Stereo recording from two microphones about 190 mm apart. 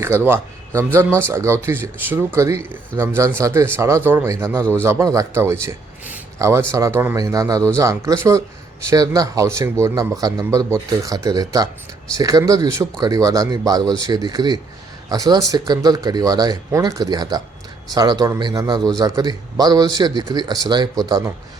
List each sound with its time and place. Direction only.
0.3 s a man's voice: 10° right (ahead or behind)